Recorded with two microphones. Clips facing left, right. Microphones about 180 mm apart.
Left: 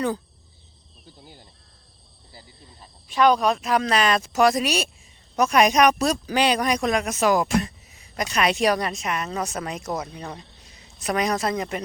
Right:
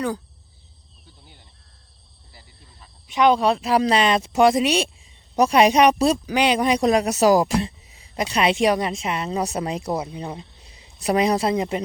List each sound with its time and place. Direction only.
1.2 s cricket: 40° left (ahead or behind)
3.1 s speech: 20° right (ahead or behind)
6.2 s speech: 15° right (ahead or behind)